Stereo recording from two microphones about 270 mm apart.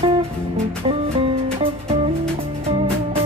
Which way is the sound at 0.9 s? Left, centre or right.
Right.